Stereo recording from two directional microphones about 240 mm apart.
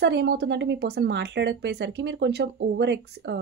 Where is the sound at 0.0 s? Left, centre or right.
Right.